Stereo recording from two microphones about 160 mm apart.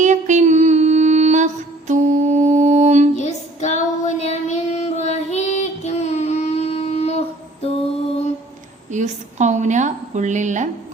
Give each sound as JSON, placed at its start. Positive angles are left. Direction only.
{"t": 0.0, "sound": "music", "side_deg": -50}
{"t": 1.9, "sound": "mantra", "side_deg": -50}
{"t": 3.2, "sound": "female singing", "side_deg": 45}
{"t": 8.9, "sound": "a sound", "side_deg": -50}